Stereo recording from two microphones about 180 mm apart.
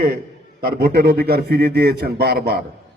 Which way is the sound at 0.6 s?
60° right (ahead or behind).